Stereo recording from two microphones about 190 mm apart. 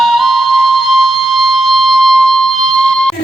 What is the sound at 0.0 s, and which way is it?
Music, centre (ahead or behind).